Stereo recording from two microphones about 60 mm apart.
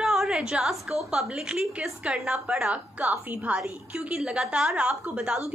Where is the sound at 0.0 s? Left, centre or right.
Centre.